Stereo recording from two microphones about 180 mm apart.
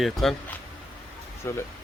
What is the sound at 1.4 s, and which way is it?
Speech, 15° left (ahead or behind).